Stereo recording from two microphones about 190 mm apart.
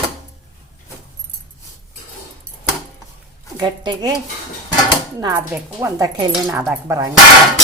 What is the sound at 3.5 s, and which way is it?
Speech, 20° right (ahead or behind).